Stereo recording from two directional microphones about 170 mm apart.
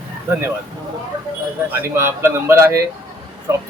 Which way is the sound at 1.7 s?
15° right (ahead or behind).